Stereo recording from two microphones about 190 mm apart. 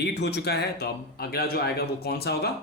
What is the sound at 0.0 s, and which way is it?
Speech, 60° left (ahead or behind).